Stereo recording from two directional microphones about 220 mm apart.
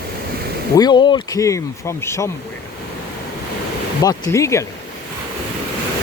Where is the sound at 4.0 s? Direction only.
15° left (ahead or behind).